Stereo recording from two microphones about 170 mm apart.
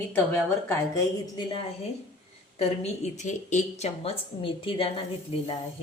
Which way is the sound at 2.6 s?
40° left (ahead or behind).